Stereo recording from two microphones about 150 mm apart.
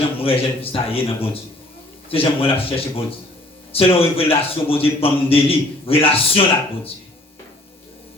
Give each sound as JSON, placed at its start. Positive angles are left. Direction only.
{"t": 0.2, "sound": "a man's voice", "side_deg": 40}